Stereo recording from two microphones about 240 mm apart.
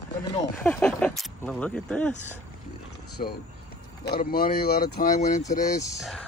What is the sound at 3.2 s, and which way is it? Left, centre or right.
Speech, left.